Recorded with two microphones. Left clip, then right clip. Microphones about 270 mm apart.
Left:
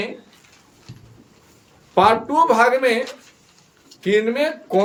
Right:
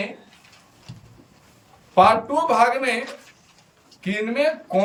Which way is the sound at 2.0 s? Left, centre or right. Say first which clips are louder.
Left 1 dB; centre.